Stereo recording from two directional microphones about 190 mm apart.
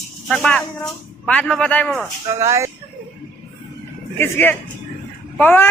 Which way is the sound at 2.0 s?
15° right (ahead or behind).